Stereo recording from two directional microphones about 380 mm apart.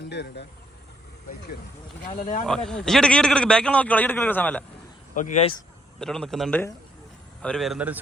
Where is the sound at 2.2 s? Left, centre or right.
Centre.